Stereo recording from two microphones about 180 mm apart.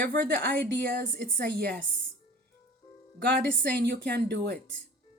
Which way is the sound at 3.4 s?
65° right (ahead or behind).